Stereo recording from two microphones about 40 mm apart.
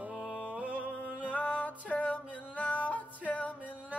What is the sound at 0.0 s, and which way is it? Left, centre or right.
Music, right.